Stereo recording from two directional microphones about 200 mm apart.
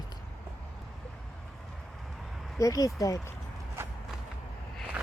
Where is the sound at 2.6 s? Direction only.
15° left (ahead or behind).